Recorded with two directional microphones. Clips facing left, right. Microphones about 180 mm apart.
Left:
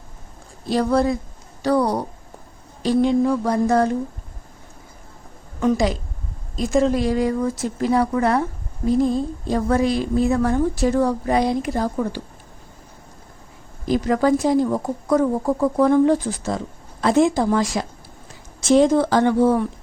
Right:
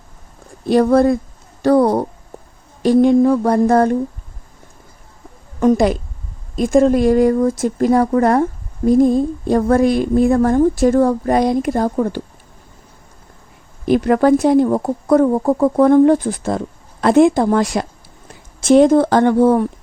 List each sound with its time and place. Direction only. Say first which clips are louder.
0.6 s a woman's voice: right 7 dB; 55° right (ahead or behind)
5.5 s a woman's voice: right 6 dB; 50° right (ahead or behind)
13.8 s speech: right 5 dB; 60° right (ahead or behind)